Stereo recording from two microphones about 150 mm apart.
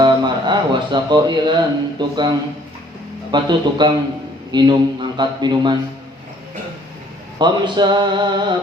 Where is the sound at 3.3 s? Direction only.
30° right (ahead or behind).